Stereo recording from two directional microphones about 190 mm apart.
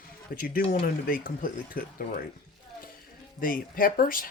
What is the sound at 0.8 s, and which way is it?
Speech, 50° left (ahead or behind).